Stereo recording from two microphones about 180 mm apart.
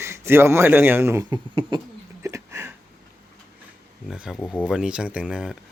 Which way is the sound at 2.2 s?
15° right (ahead or behind).